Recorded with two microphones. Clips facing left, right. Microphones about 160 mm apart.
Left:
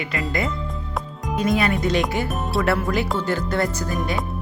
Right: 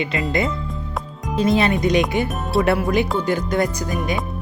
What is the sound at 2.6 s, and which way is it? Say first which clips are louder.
Speech: right 4 dB; 20° right (ahead or behind).